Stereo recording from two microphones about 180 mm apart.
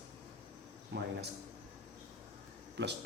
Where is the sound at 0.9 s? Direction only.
65° right (ahead or behind).